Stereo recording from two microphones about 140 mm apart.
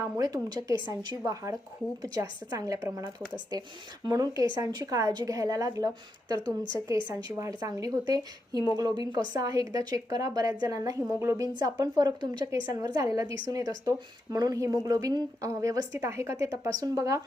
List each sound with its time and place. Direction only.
0.0 s a woman's voice: 25° right (ahead or behind)